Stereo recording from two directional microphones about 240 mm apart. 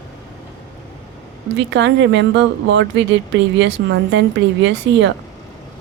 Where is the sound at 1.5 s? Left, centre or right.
Right.